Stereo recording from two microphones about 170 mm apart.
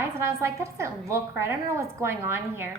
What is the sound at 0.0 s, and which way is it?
A woman's voice, 15° right (ahead or behind).